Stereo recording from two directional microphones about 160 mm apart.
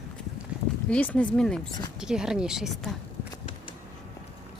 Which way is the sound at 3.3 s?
30° left (ahead or behind).